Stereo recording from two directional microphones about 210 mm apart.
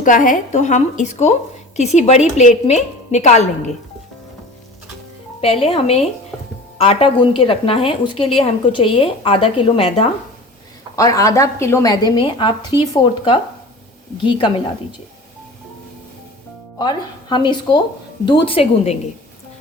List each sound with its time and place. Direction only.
0.0 s a woman's voice: 40° left (ahead or behind)
5.6 s a woman's voice: 30° left (ahead or behind)
6.3 s music: centre (ahead or behind)
6.7 s a woman's voice: 25° left (ahead or behind)
10.9 s a woman's voice: 15° left (ahead or behind)
16.7 s a woman's voice: 20° left (ahead or behind)